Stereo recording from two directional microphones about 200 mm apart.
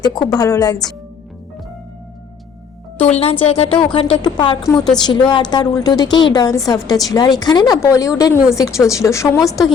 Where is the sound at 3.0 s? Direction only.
30° left (ahead or behind); by 9.4 s 15° left (ahead or behind).